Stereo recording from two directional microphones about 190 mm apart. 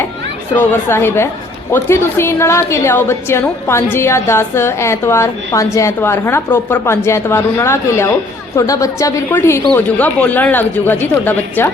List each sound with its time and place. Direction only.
0.5 s a woman's voice: 10° left (ahead or behind)